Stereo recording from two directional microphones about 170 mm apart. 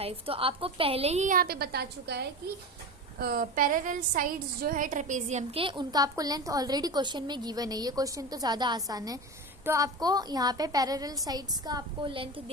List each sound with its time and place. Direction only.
0.0 s a woman's voice: 35° right (ahead or behind)